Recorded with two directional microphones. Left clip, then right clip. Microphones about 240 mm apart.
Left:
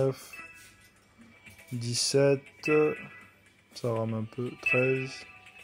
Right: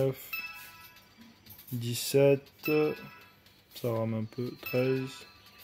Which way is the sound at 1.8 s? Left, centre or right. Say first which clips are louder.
Even; centre.